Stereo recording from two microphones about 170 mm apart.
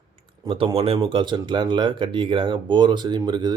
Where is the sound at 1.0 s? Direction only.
30° right (ahead or behind).